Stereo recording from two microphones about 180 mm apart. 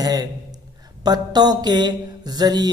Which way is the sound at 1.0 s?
20° right (ahead or behind).